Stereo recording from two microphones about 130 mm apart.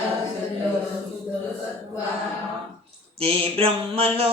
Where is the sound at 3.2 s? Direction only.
50° right (ahead or behind).